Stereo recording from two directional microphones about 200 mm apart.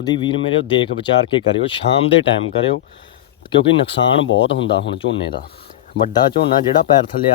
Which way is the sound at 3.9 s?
60° left (ahead or behind).